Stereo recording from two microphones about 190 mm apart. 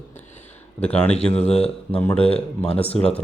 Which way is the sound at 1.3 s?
35° left (ahead or behind).